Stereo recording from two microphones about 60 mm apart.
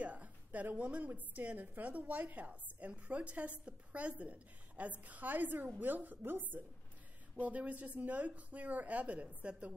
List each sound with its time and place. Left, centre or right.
0.0 s a woman's voice: right